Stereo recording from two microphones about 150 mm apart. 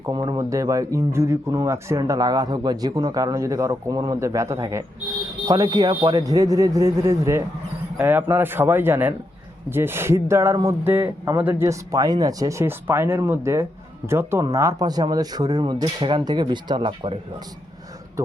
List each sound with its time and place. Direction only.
0.0 s speech: 25° right (ahead or behind)